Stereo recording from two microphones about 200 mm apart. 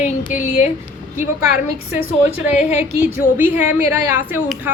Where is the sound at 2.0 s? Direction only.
10° right (ahead or behind).